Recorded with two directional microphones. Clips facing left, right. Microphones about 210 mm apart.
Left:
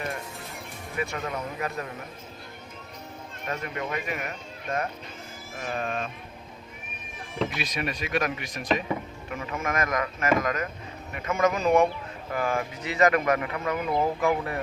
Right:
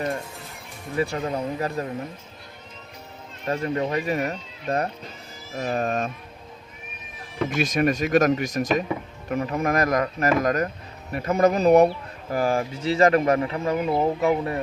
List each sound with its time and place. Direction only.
0.9 s speech: 30° right (ahead or behind)
3.4 s speech: 30° right (ahead or behind)
7.5 s speech: 45° right (ahead or behind); by 14.6 s 25° right (ahead or behind)